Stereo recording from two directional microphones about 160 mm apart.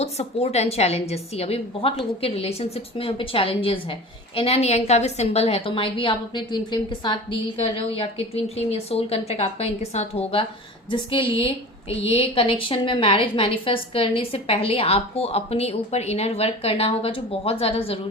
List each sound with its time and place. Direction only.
0.0 s a woman's voice: 40° left (ahead or behind)